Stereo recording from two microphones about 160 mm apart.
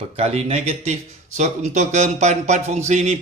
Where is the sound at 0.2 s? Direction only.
40° right (ahead or behind).